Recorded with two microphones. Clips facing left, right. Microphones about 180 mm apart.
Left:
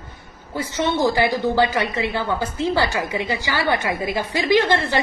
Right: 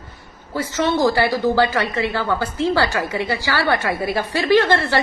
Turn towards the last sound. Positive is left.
turn(degrees=15)  # may be behind; listen again after turning